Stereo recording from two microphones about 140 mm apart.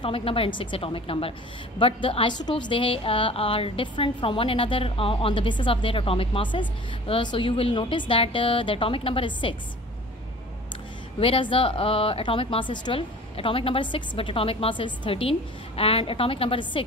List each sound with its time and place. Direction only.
0.0 s a woman's voice: 40° left (ahead or behind)
11.1 s a woman's voice: 40° left (ahead or behind)